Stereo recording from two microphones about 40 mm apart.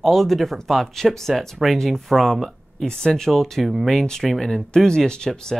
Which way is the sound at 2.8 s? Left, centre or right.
Centre.